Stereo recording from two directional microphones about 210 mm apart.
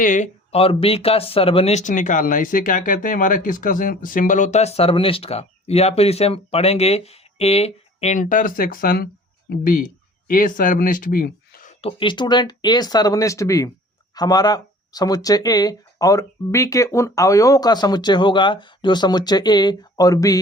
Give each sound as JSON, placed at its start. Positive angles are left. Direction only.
{"t": 0.0, "sound": "speech", "side_deg": 35}